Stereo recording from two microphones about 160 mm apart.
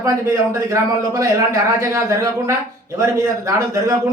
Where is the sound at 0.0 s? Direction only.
20° right (ahead or behind).